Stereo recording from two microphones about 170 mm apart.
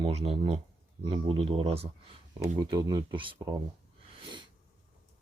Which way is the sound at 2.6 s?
20° right (ahead or behind).